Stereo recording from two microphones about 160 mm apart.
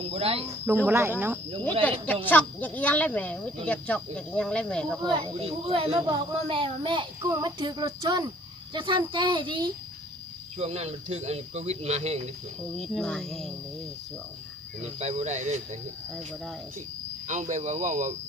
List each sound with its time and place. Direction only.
0.0 s a child's voice: 35° right (ahead or behind)
0.9 s speech: 15° right (ahead or behind)
2.2 s speech: 10° left (ahead or behind)
5.1 s a child's voice: 35° right (ahead or behind)
10.6 s speech: 40° right (ahead or behind)
12.7 s speech: centre (ahead or behind)
14.8 s speech: 45° right (ahead or behind)
17.2 s speech: 50° right (ahead or behind)